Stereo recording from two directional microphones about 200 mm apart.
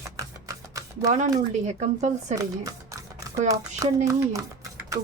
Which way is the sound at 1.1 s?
35° right (ahead or behind).